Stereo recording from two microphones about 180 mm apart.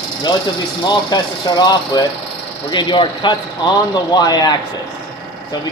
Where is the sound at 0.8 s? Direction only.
25° left (ahead or behind).